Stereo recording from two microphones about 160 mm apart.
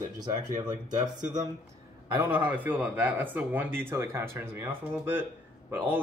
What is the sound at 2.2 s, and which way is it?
Speech, 10° right (ahead or behind).